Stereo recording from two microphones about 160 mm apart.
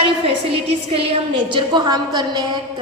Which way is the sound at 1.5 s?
25° right (ahead or behind).